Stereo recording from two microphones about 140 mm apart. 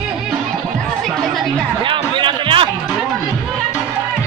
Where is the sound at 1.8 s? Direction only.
35° right (ahead or behind).